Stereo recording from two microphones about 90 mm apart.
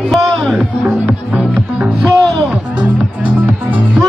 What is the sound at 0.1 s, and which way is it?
Music, centre (ahead or behind).